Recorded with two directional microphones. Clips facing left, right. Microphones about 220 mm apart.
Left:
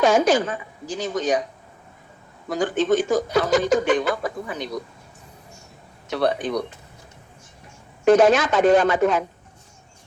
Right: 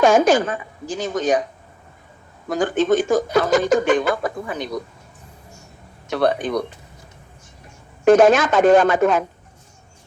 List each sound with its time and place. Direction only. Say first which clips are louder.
0.0 s speech: right 3 dB; 50° right (ahead or behind)
2.5 s speech: right 2 dB; 50° right (ahead or behind)
6.1 s speech: right 3 dB; 50° right (ahead or behind)
8.0 s speech: right 3 dB; 50° right (ahead or behind)